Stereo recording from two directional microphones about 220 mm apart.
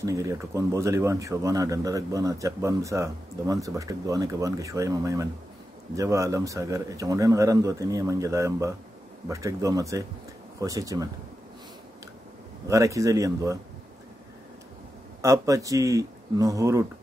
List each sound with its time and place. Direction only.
0.0 s speech: 15° right (ahead or behind)
12.6 s speech: 15° right (ahead or behind)
15.2 s speech: 15° right (ahead or behind)